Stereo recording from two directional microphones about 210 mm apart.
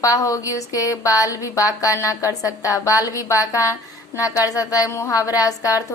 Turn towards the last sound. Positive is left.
turn(degrees=15)  # may be behind; listen again after turning